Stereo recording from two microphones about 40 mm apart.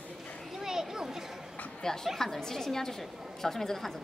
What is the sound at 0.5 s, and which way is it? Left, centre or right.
Children playing, centre.